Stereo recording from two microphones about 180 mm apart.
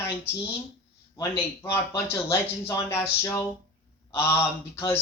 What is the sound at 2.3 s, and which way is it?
Speech, 15° left (ahead or behind).